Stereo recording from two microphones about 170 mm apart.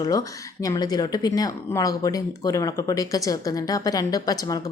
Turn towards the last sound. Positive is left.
turn(degrees=20)  # may be behind; listen again after turning